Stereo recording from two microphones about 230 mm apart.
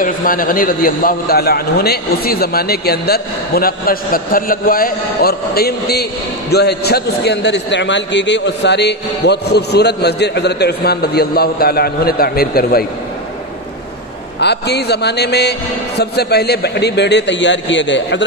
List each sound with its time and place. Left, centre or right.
0.0 s a man's voice: left
14.4 s a man's voice: left